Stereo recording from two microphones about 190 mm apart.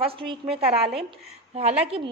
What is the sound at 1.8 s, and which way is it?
Speech, 30° right (ahead or behind).